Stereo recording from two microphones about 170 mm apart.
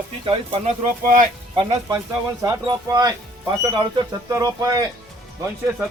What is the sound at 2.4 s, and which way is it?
Speech, 20° right (ahead or behind).